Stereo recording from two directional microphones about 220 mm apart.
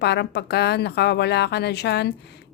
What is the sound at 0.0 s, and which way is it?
A woman's voice, 50° left (ahead or behind).